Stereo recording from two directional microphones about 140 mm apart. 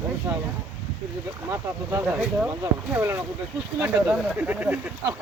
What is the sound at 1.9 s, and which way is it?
Speech, 15° right (ahead or behind).